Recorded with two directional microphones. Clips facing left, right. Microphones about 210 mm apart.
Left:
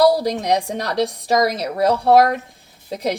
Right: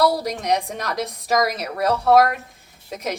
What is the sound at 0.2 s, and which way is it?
A woman's voice, 30° left (ahead or behind).